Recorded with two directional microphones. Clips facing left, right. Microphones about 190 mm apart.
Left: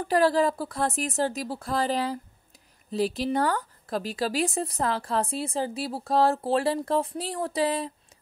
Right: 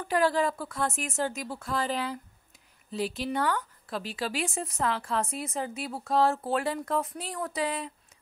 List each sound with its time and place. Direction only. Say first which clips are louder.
0.0 s speech: left 4 dB; 35° left (ahead or behind)